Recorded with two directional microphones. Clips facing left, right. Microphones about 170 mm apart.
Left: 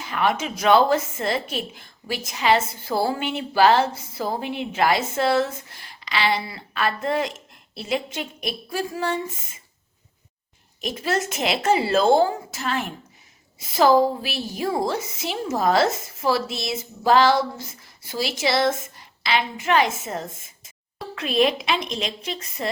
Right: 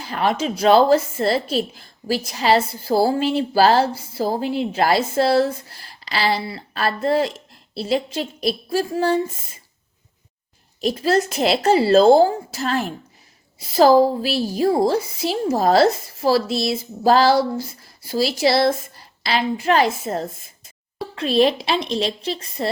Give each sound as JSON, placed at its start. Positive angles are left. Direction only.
{"t": 0.0, "sound": "speech", "side_deg": -35}
{"t": 10.8, "sound": "speech", "side_deg": -35}